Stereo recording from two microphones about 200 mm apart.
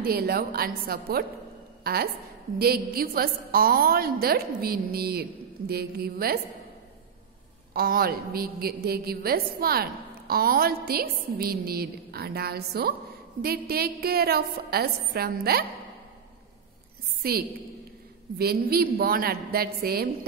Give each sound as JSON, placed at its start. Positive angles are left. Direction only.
{"t": 0.0, "sound": "a woman's voice", "side_deg": -50}
{"t": 7.7, "sound": "a woman's voice", "side_deg": -50}
{"t": 17.2, "sound": "a woman's voice", "side_deg": -50}